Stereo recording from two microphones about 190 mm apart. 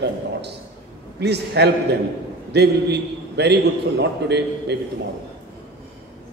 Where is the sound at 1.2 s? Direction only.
60° right (ahead or behind).